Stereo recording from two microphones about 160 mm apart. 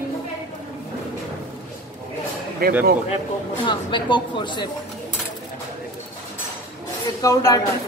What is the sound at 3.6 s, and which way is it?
A woman's voice, 30° left (ahead or behind).